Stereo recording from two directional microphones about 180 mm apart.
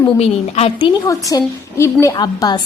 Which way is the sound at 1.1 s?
20° left (ahead or behind).